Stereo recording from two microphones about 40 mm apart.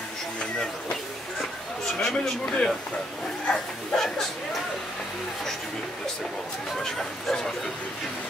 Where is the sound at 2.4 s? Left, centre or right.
Centre.